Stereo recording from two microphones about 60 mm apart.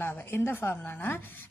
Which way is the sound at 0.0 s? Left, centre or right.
Left.